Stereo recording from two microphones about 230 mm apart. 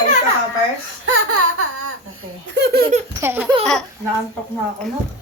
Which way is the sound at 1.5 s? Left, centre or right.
Right.